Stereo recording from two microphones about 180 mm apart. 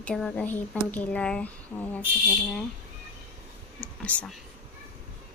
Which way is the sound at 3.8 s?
10° left (ahead or behind).